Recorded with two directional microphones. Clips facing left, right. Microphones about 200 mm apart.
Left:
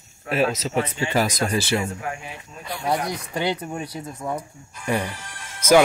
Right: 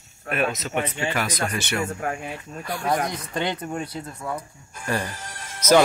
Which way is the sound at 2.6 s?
15° left (ahead or behind).